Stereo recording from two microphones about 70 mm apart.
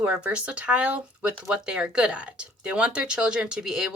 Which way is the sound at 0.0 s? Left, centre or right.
Centre.